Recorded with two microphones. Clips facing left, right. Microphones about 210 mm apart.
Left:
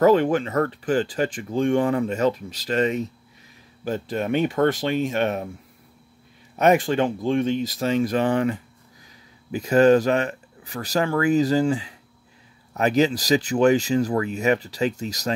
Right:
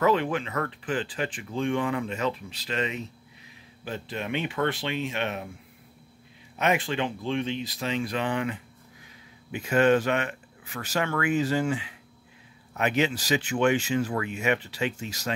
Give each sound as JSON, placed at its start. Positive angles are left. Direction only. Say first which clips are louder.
{"t": 0.0, "sound": "speech", "louder": "left 7 dB", "side_deg": 40}
{"t": 6.6, "sound": "speech", "louder": "left 8 dB", "side_deg": 45}